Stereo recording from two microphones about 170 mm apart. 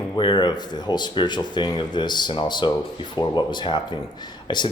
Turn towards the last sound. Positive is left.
turn(degrees=25)  # may be behind; listen again after turning